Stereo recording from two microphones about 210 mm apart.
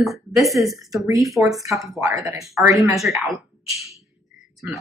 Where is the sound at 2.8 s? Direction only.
Centre (ahead or behind).